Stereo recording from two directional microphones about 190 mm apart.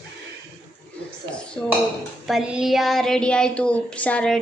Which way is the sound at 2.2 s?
Centre (ahead or behind).